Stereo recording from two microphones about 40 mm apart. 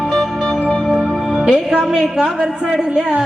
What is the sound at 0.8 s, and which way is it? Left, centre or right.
Music, centre.